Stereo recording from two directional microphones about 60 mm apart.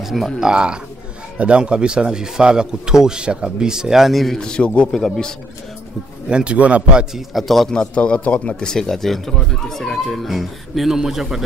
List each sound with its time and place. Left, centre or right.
0.0 s speech: centre
0.4 s speech: centre
4.4 s speech: centre
6.2 s speech: centre
7.2 s speech: centre